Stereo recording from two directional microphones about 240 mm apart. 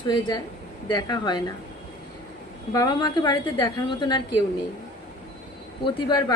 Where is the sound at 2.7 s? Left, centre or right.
Centre.